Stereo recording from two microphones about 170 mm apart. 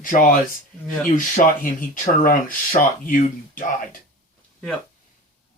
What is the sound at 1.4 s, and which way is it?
Speech, 45° left (ahead or behind).